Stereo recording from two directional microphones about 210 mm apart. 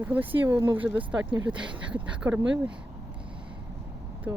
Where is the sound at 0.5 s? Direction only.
20° right (ahead or behind).